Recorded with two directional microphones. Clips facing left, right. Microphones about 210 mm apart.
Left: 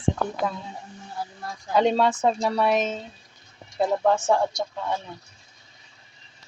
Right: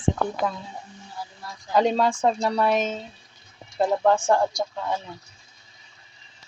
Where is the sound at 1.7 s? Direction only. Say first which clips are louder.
Even; centre (ahead or behind).